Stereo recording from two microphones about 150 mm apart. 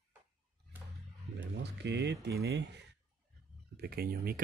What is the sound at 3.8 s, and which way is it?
Speech, 90° right.